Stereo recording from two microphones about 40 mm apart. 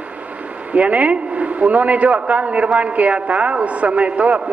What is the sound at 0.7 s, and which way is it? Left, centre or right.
A man's voice, right.